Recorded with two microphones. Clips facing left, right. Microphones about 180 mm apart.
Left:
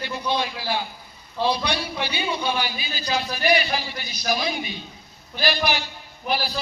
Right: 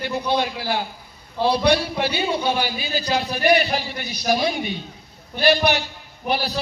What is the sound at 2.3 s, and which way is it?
Speech, 55° right (ahead or behind).